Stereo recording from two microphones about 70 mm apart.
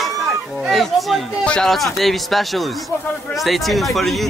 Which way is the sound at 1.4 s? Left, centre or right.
Centre.